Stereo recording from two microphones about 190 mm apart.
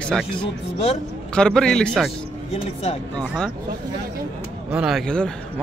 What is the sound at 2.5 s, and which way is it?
Speech, 30° left (ahead or behind).